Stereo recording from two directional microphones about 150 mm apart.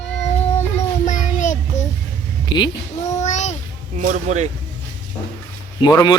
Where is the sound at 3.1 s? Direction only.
50° left (ahead or behind).